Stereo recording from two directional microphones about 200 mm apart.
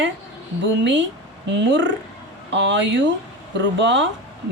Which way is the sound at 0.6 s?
65° right (ahead or behind).